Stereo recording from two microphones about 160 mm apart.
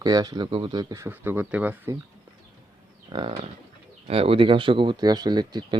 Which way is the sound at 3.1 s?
30° right (ahead or behind).